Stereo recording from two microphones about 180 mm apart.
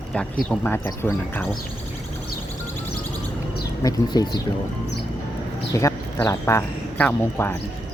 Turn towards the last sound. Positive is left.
turn(degrees=10)  # may be behind; listen again after turning